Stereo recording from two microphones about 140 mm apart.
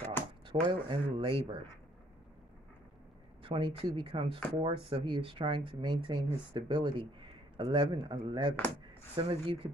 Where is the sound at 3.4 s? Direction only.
40° right (ahead or behind).